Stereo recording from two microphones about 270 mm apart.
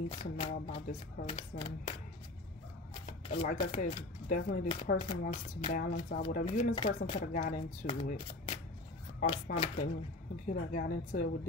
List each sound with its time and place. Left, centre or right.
0.1 s a woman's voice: left